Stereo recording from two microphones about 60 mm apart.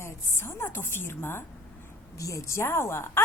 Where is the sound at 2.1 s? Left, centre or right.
Left.